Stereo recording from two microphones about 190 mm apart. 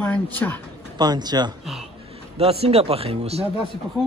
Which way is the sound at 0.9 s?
20° right (ahead or behind).